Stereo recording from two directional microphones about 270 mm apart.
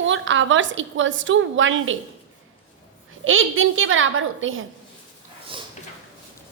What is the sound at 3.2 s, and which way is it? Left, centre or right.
A woman's voice, right.